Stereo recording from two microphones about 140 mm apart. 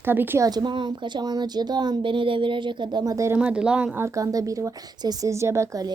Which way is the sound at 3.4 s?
10° right (ahead or behind).